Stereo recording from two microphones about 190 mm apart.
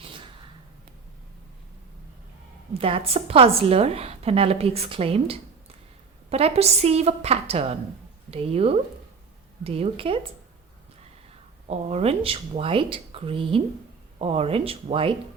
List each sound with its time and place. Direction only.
0.0 s gasp: 30° right (ahead or behind)
2.7 s a woman's voice: 30° right (ahead or behind)
11.7 s a woman's voice: 35° right (ahead or behind)